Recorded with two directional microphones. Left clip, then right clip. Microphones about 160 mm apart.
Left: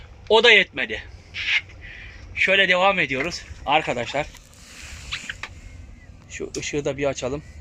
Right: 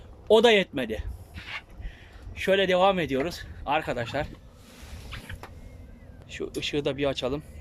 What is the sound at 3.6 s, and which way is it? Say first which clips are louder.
Speech: left 6 dB; centre (ahead or behind).